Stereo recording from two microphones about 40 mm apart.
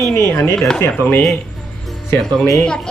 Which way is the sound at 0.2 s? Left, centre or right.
Left.